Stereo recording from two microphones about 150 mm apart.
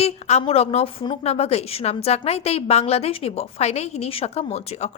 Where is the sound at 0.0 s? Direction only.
45° left (ahead or behind).